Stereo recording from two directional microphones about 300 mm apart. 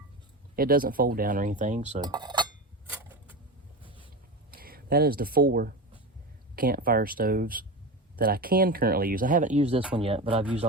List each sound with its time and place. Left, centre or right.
0.5 s speech: right
2.9 s a sound: centre
4.5 s speech: right